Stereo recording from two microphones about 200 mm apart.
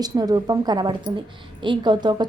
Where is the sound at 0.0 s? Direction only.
20° right (ahead or behind).